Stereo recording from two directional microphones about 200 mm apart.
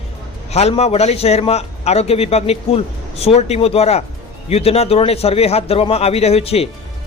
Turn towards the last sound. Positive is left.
turn(degrees=30)  # may be behind; listen again after turning